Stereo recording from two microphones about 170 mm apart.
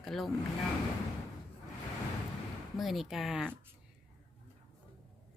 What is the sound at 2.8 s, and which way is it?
Speech, centre (ahead or behind).